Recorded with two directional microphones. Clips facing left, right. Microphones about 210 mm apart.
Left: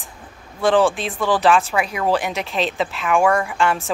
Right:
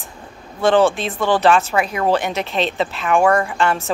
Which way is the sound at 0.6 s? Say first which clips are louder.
Right 2 dB; centre (ahead or behind).